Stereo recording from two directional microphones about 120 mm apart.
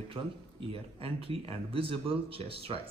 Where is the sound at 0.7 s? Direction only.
50° right (ahead or behind).